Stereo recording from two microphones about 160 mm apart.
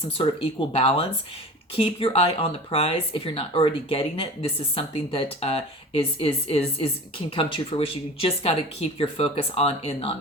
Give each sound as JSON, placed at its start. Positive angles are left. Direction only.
{"t": 0.2, "sound": "speech", "side_deg": 35}